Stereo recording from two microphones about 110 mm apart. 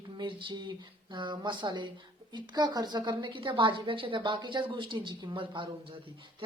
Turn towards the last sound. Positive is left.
turn(degrees=-50)  # may be behind; listen again after turning